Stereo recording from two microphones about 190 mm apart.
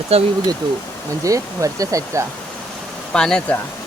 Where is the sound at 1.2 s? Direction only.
15° right (ahead or behind).